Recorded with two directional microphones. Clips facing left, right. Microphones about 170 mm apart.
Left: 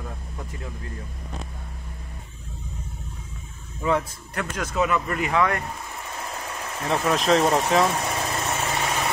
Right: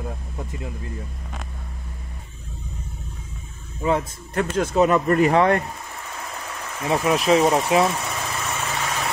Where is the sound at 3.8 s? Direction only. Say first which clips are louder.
Right 2 dB; 25° right (ahead or behind).